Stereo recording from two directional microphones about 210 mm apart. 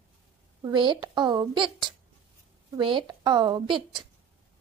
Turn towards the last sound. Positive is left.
turn(degrees=-20)  # may be behind; listen again after turning